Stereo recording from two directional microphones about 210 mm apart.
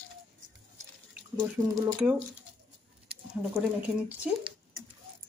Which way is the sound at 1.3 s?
15° right (ahead or behind).